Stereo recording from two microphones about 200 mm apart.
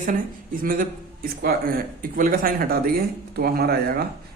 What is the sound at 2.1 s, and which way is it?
A man's voice, 45° right (ahead or behind).